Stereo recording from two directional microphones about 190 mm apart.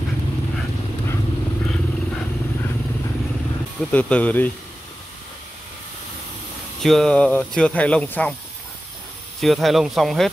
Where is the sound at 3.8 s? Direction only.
5° left (ahead or behind).